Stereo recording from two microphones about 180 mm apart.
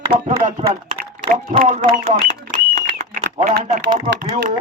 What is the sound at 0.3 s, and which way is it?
Speech, 50° right (ahead or behind).